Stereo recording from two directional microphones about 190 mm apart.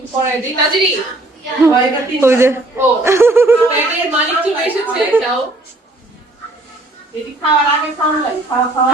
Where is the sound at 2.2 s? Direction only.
15° right (ahead or behind).